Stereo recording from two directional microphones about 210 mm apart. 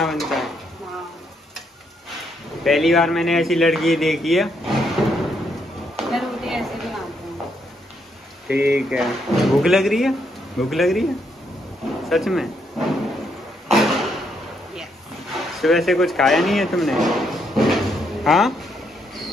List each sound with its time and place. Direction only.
0.0 s drawer open or close: centre (ahead or behind)
2.6 s speech: centre (ahead or behind)
5.9 s chop: centre (ahead or behind)
8.5 s speech: 10° right (ahead or behind)
12.1 s a sound: centre (ahead or behind)
15.3 s speech: centre (ahead or behind)